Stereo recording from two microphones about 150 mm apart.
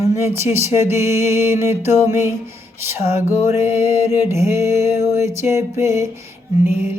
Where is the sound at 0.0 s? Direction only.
20° right (ahead or behind).